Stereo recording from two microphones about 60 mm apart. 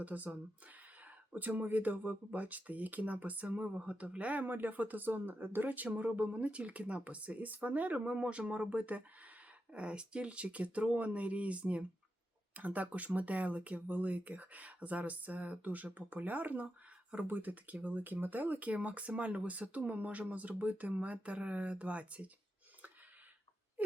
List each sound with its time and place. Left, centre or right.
0.0 s speech: right
17.2 s speech: right